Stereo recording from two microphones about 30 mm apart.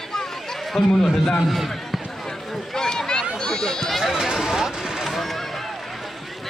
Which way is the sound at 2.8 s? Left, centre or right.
Centre.